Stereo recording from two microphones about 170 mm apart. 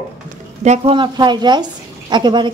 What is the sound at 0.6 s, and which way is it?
Speech, 40° right (ahead or behind).